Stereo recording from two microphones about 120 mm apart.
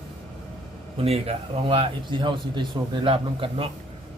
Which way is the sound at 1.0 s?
60° right (ahead or behind).